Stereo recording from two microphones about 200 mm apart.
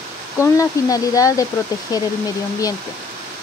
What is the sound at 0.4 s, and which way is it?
Speech, 15° left (ahead or behind).